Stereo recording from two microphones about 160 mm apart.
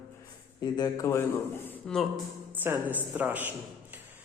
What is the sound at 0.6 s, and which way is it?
Speech, 25° left (ahead or behind).